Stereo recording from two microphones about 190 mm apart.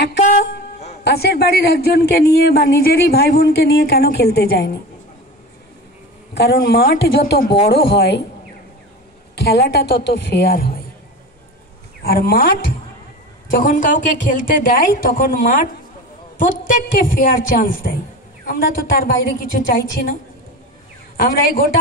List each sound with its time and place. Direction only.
1.0 s speech: 55° left (ahead or behind)
6.3 s speech: 60° left (ahead or behind)
9.3 s speech: 55° left (ahead or behind)
12.0 s a woman's voice: 50° left (ahead or behind)
21.2 s a woman's voice: 50° left (ahead or behind)